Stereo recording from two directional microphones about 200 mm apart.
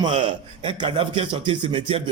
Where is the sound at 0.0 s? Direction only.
25° right (ahead or behind).